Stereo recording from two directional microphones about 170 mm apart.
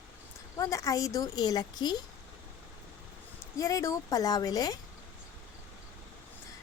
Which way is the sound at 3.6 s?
20° left (ahead or behind).